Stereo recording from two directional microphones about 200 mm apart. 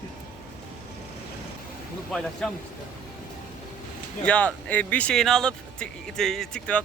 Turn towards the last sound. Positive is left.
turn(degrees=5)  # may be behind; listen again after turning